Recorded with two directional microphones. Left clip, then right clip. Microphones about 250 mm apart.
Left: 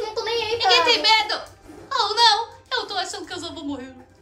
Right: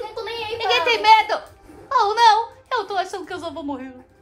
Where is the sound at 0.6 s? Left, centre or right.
Right.